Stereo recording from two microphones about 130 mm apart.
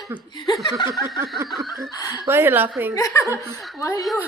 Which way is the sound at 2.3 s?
15° right (ahead or behind).